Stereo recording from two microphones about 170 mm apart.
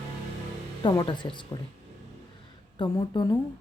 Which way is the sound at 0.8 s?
25° left (ahead or behind).